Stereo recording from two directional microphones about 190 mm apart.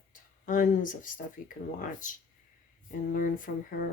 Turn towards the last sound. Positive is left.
turn(degrees=45)  # may be behind; listen again after turning